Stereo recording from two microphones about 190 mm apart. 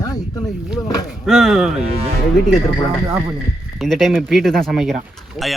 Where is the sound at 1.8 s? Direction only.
35° right (ahead or behind).